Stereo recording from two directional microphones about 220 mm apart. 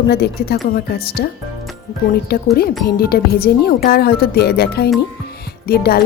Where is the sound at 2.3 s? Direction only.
45° left (ahead or behind).